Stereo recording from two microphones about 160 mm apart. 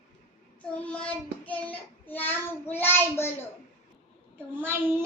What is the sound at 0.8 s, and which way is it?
Child singing, 10° left (ahead or behind).